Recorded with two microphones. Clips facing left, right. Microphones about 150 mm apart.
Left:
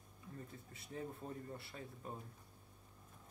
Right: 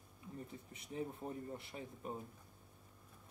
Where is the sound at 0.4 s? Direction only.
20° right (ahead or behind).